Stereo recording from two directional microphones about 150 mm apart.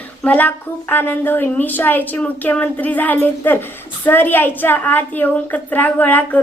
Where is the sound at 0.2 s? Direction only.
10° left (ahead or behind).